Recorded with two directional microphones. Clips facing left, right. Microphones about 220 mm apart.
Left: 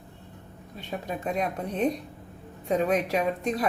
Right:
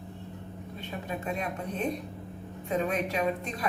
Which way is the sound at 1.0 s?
35° left (ahead or behind).